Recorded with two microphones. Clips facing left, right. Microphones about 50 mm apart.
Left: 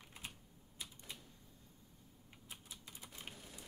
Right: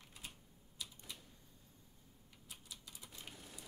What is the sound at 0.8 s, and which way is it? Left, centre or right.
Typewriter, left.